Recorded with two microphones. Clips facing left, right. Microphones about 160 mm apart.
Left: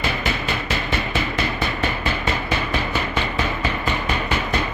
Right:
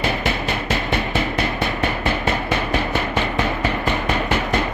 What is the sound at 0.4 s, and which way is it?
Music, 55° right (ahead or behind).